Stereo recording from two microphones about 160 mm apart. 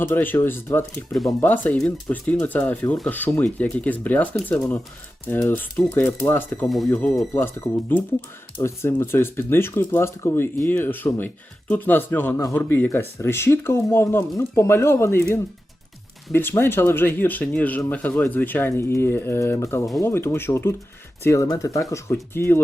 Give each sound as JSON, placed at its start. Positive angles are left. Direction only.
{"t": 0.0, "sound": "speech", "side_deg": 10}
{"t": 6.7, "sound": "speech", "side_deg": 0}
{"t": 6.9, "sound": "speech", "side_deg": 10}